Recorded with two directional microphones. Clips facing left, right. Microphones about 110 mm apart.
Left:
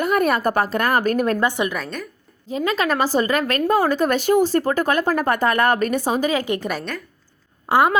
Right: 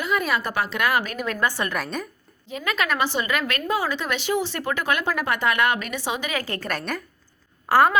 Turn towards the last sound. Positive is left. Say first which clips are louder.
# left 1 dB
turn(degrees=20)  # may be behind; listen again after turning